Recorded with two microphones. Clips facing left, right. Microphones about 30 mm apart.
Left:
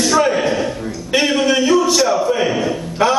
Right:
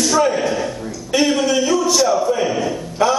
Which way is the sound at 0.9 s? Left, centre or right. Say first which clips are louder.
Right 1 dB; left.